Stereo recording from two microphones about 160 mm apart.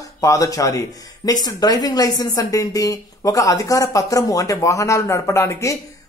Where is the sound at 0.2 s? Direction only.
20° left (ahead or behind).